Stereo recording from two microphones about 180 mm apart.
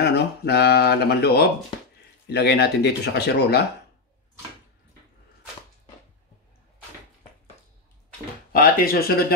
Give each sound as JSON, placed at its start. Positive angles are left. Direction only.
{"t": 0.0, "sound": "speech", "side_deg": 65}
{"t": 8.5, "sound": "speech", "side_deg": 55}